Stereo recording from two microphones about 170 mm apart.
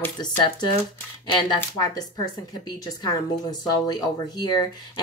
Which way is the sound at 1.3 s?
25° left (ahead or behind).